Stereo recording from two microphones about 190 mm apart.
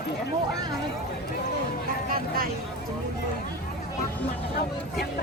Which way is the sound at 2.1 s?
50° right (ahead or behind).